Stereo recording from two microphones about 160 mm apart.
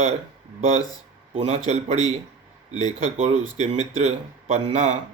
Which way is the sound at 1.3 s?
40° right (ahead or behind).